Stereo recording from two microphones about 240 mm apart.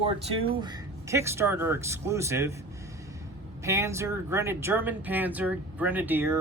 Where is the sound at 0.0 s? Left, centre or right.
Right.